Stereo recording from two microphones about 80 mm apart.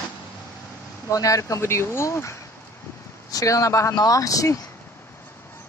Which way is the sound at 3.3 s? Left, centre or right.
Left.